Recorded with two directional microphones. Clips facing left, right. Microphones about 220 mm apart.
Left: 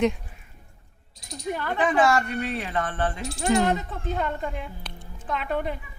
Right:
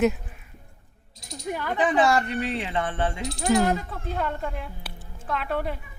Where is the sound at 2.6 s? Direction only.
15° right (ahead or behind).